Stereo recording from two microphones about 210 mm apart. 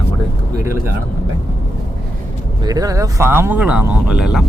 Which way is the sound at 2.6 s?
15° right (ahead or behind).